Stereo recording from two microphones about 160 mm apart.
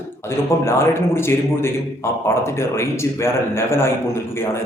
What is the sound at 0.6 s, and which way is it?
Speech, 15° left (ahead or behind).